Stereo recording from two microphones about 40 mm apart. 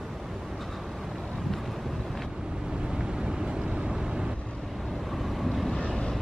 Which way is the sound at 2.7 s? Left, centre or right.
Right.